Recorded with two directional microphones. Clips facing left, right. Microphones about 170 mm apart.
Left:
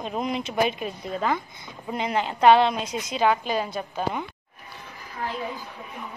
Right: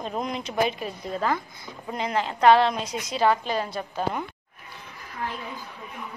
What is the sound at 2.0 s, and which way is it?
Speech, 25° left (ahead or behind).